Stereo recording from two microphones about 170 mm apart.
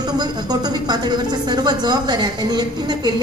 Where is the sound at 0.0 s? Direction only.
25° right (ahead or behind).